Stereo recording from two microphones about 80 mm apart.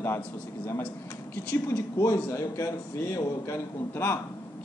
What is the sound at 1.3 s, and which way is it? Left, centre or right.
Speech, left.